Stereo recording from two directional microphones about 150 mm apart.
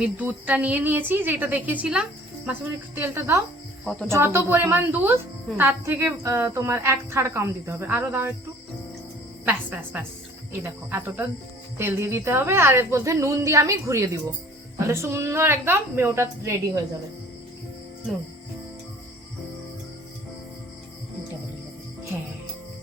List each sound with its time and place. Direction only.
0.0 s a woman's voice: 10° right (ahead or behind)
9.5 s a woman's voice: 10° right (ahead or behind)